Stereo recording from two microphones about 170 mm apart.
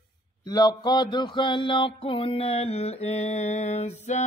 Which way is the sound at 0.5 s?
25° left (ahead or behind).